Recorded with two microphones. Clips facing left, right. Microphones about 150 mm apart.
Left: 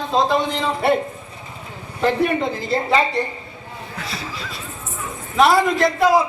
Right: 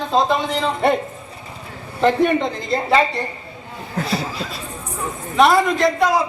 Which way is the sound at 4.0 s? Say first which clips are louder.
Right 9 dB; 45° right (ahead or behind).